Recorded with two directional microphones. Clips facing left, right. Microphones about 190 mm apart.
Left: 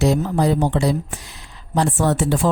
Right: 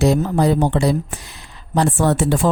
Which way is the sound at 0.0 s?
55° right (ahead or behind).